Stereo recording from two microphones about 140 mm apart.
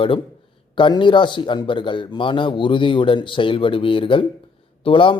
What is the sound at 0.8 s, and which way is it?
A man's voice, 35° left (ahead or behind).